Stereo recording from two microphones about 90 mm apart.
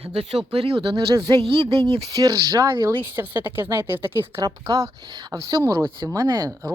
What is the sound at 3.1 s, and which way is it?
Speech, 25° right (ahead or behind).